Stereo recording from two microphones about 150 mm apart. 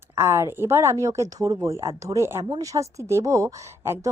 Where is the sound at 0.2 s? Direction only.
15° right (ahead or behind).